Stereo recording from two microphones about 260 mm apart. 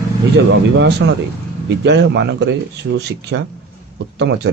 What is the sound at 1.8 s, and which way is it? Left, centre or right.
Speech, right.